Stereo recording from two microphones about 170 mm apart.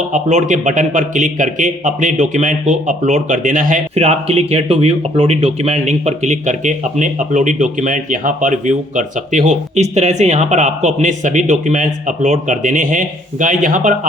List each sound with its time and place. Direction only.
0.1 s a man's voice: 45° right (ahead or behind)